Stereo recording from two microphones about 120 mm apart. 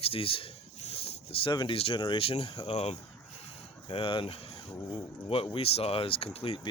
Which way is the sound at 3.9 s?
45° left (ahead or behind).